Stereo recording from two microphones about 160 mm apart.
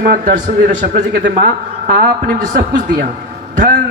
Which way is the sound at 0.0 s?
50° right (ahead or behind).